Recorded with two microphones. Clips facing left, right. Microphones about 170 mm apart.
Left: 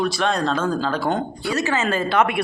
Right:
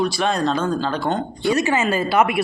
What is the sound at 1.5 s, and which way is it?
Speech, 15° right (ahead or behind).